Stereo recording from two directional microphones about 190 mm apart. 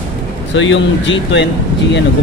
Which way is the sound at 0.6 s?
75° left (ahead or behind).